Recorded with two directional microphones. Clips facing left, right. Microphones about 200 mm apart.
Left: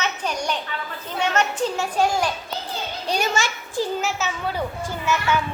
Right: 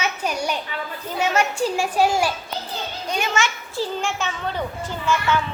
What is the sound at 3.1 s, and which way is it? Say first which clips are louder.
Speech: left 1 dB; 35° left (ahead or behind).